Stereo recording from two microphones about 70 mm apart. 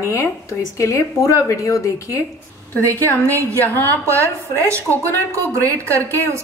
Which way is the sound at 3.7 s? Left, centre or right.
Left.